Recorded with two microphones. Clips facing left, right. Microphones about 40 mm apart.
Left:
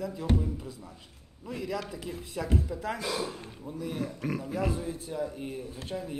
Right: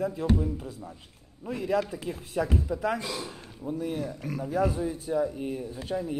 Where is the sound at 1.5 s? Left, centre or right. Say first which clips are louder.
Right 7 dB; right.